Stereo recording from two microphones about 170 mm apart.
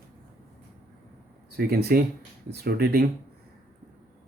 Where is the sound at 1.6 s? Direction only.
65° right (ahead or behind).